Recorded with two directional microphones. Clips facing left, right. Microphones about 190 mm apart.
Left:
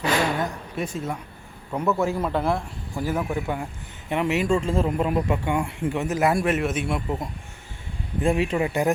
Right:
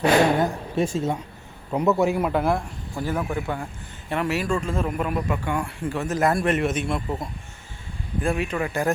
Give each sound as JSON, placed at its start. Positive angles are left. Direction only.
{"t": 0.1, "sound": "a sound", "side_deg": -30}
{"t": 0.9, "sound": "a man's voice", "side_deg": -25}
{"t": 8.2, "sound": "speech", "side_deg": 25}